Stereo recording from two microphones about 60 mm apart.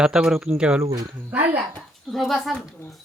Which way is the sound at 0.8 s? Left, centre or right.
Right.